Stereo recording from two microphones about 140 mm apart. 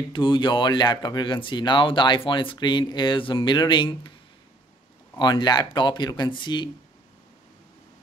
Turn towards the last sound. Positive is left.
turn(degrees=35)  # may be behind; listen again after turning